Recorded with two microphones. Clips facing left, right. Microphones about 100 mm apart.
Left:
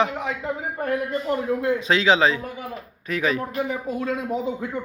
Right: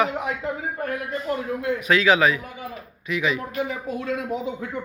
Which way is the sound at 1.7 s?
25° left (ahead or behind).